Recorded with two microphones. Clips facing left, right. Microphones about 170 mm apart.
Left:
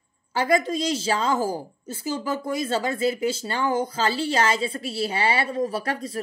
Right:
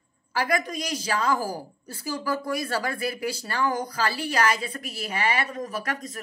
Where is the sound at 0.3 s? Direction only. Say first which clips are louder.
Left 4 dB; 25° left (ahead or behind).